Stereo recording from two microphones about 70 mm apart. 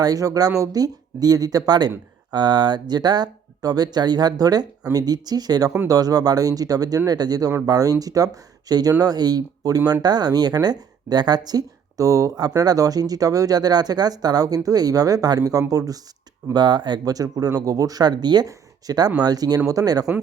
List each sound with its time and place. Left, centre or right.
0.0 s speech: right
2.3 s speech: right
16.5 s speech: right
17.3 s speech: right